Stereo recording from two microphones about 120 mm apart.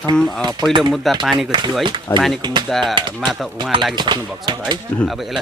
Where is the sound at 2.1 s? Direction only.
15° left (ahead or behind).